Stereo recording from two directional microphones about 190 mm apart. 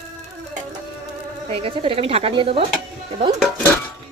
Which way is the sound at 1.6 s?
30° right (ahead or behind).